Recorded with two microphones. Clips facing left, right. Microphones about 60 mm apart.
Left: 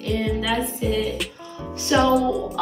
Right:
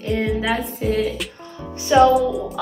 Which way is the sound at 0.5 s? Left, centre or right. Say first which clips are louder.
Right 2 dB; right.